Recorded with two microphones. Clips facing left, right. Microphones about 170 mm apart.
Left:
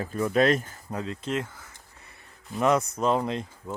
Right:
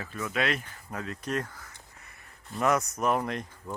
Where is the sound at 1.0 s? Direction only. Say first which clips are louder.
Left 2 dB; 25° left (ahead or behind).